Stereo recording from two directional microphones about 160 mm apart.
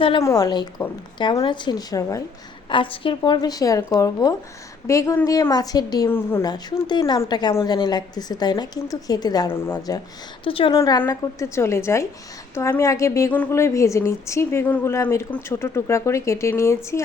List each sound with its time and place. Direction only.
0.2 s a woman's voice: 20° left (ahead or behind)
2.6 s a woman's voice: 30° left (ahead or behind); by 6.5 s 15° left (ahead or behind)
6.5 s a woman's voice: 25° left (ahead or behind)
10.4 s a woman's voice: 35° left (ahead or behind); by 17.0 s 15° left (ahead or behind)